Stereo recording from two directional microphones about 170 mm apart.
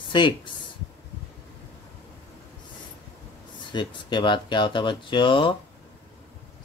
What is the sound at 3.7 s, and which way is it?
Speech, 25° left (ahead or behind).